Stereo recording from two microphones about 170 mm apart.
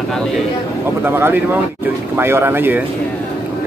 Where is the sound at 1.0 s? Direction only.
10° right (ahead or behind).